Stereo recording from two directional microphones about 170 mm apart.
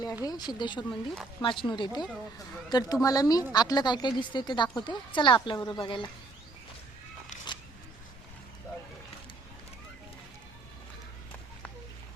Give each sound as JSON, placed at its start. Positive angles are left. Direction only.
{"t": 0.3, "sound": "speech", "side_deg": 25}
{"t": 0.9, "sound": "speech", "side_deg": 5}
{"t": 1.4, "sound": "speech", "side_deg": 30}